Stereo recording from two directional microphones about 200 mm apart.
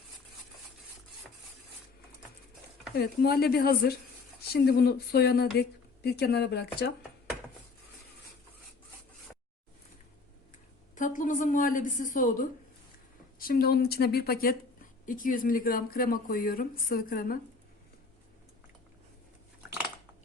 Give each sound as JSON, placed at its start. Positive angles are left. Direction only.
{"t": 3.0, "sound": "speech", "side_deg": 50}
{"t": 10.9, "sound": "a woman's voice", "side_deg": 40}